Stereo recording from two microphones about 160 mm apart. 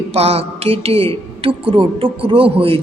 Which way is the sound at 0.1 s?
40° right (ahead or behind).